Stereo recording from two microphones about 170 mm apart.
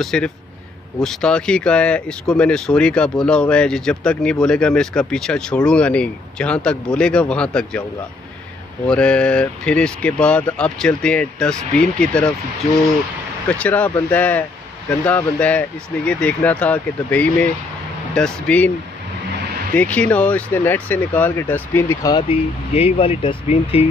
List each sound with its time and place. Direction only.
0.0 s speech: 5° left (ahead or behind)
8.8 s speech: 5° left (ahead or behind)
13.5 s speech: 5° left (ahead or behind)
19.7 s speech: 10° left (ahead or behind)
22.1 s speech: 35° left (ahead or behind)